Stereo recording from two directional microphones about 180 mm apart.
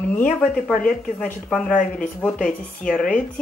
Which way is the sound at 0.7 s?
5° left (ahead or behind).